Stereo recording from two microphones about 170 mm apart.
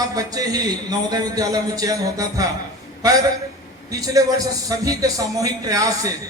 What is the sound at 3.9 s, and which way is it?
A man's voice, 20° right (ahead or behind).